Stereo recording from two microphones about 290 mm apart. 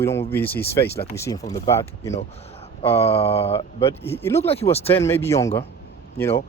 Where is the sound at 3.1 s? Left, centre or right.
Centre.